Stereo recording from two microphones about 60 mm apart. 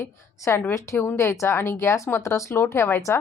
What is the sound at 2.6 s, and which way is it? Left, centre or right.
Speech, left.